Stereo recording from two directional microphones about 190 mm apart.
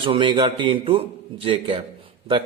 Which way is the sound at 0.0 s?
25° right (ahead or behind).